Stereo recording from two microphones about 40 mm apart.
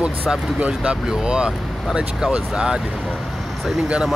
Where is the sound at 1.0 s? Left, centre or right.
Right.